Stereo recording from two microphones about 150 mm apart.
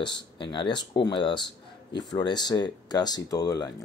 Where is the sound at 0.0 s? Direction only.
30° left (ahead or behind).